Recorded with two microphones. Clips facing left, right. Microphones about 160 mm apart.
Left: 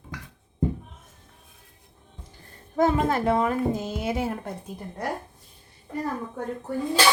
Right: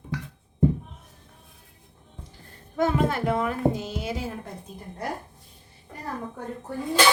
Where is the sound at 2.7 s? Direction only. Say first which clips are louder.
Left 2 dB; 40° left (ahead or behind); by 4.3 s 55° left (ahead or behind).